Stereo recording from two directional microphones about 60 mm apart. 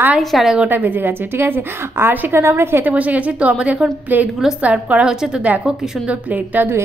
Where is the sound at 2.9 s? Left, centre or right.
Right.